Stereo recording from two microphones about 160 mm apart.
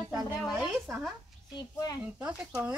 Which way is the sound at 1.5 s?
25° left (ahead or behind).